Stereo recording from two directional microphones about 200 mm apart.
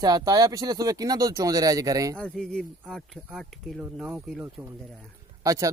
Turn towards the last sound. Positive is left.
turn(degrees=-15)  # may be behind; listen again after turning